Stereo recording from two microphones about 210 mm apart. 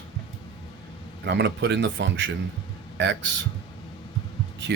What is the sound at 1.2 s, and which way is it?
Speech, 55° right (ahead or behind).